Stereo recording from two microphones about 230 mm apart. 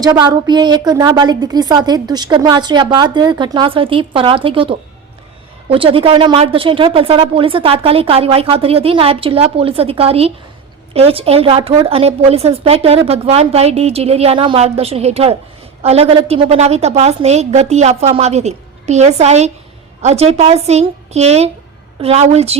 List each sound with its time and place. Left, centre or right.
0.0 s a woman's voice: centre